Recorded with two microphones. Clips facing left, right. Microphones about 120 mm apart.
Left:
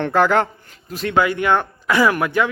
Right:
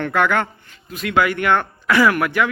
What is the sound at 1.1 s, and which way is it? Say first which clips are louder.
A man's voice: even; 20° left (ahead or behind).